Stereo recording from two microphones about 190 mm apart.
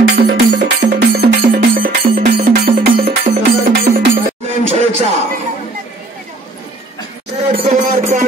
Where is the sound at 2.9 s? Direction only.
30° right (ahead or behind).